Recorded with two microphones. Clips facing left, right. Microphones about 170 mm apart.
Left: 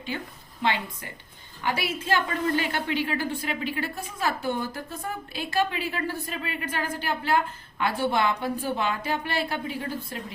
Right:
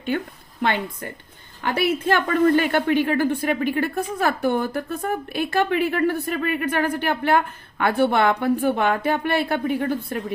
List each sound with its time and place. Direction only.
0.1 s a woman's voice: 55° right (ahead or behind)